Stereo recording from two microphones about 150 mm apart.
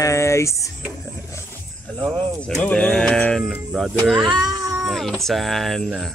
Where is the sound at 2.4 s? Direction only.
5° left (ahead or behind).